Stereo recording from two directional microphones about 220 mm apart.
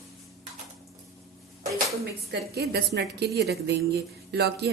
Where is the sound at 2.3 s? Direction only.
45° right (ahead or behind).